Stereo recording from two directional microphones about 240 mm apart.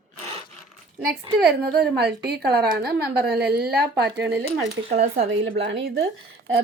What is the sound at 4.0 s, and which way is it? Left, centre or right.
Speech, right.